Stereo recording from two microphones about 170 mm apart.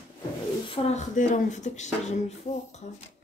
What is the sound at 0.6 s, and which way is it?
Speech, 35° left (ahead or behind).